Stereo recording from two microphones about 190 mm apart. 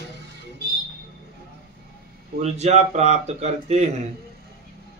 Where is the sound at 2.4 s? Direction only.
35° right (ahead or behind).